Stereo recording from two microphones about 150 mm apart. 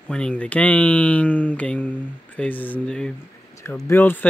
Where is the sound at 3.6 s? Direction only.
20° left (ahead or behind).